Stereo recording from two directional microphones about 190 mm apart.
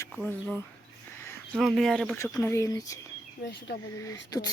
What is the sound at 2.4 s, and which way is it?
Speech, 15° left (ahead or behind).